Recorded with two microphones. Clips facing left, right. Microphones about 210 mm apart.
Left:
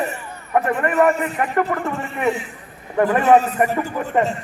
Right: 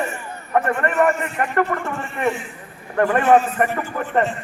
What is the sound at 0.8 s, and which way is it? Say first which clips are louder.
A man's voice: left 2 dB; 5° left (ahead or behind).